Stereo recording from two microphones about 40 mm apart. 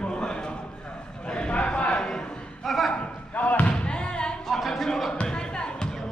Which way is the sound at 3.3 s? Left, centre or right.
Left.